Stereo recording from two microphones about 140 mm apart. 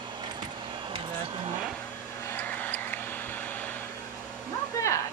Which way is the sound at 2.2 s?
15° left (ahead or behind).